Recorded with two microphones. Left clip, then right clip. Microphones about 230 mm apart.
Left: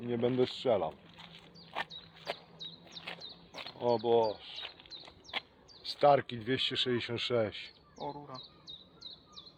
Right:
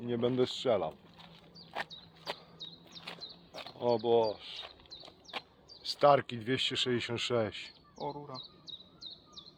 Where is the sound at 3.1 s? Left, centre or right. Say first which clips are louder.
Even; right.